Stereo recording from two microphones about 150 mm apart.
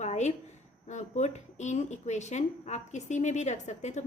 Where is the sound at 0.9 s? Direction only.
50° left (ahead or behind).